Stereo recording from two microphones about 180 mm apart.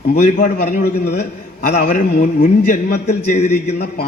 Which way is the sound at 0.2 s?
45° left (ahead or behind).